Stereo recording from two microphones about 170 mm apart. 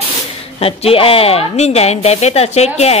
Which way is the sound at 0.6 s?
35° left (ahead or behind).